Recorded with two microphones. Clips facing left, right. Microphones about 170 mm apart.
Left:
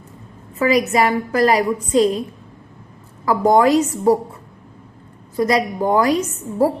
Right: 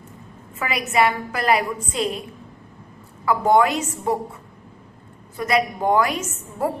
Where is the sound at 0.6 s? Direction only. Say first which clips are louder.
Left 5 dB; 40° left (ahead or behind).